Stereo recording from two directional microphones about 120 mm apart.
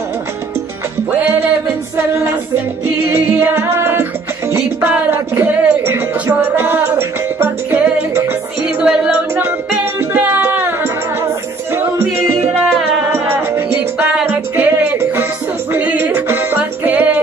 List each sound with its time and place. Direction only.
3.1 s music: 20° right (ahead or behind)
8.6 s music: 10° right (ahead or behind)